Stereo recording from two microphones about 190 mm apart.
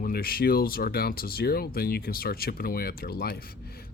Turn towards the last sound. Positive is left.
turn(degrees=55)  # may be behind; listen again after turning